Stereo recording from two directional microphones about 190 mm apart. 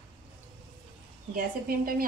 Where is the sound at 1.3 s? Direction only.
50° right (ahead or behind).